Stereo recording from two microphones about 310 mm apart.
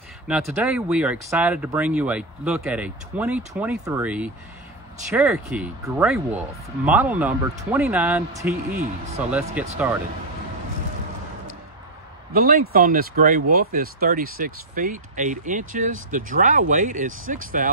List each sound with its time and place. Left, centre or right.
0.3 s speech: centre
12.3 s speech: right